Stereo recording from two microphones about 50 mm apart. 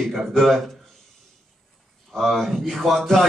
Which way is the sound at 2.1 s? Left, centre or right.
Centre.